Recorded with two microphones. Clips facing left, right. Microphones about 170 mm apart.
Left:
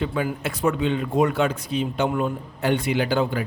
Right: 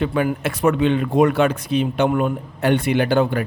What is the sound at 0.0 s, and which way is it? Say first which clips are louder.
Speech: right 5 dB; 65° right (ahead or behind).